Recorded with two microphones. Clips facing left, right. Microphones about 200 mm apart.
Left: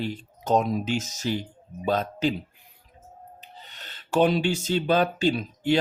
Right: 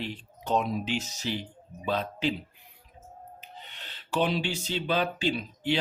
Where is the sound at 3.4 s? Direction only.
40° left (ahead or behind).